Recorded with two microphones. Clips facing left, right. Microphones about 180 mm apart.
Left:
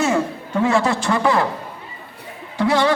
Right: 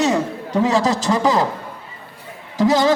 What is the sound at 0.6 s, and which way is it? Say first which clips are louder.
Speech: even; 40° right (ahead or behind).